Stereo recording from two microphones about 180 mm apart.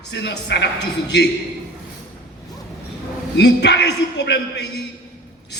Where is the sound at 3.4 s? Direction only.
70° left (ahead or behind).